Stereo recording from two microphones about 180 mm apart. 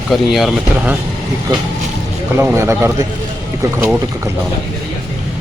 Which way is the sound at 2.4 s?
15° right (ahead or behind).